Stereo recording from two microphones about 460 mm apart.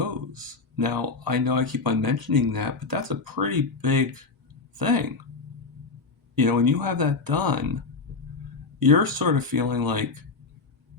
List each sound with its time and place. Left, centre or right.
0.0 s speech: right
6.3 s speech: right
8.8 s speech: right